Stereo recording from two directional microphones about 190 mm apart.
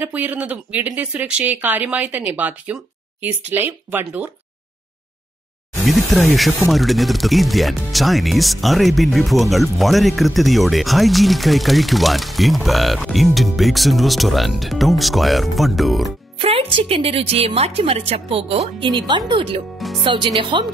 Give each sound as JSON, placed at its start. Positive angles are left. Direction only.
{"t": 0.0, "sound": "speech", "side_deg": -10}
{"t": 5.9, "sound": "a sound", "side_deg": 0}
{"t": 6.7, "sound": "speech", "side_deg": 0}
{"t": 16.3, "sound": "a woman's voice", "side_deg": -30}